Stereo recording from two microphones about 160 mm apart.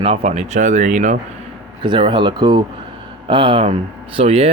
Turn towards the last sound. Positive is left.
turn(degrees=-40)  # may be behind; listen again after turning